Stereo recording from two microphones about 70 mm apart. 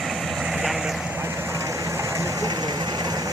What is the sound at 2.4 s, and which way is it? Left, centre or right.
Vehicle, right.